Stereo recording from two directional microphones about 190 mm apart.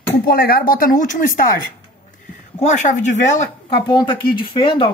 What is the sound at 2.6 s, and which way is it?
Speech, 40° left (ahead or behind).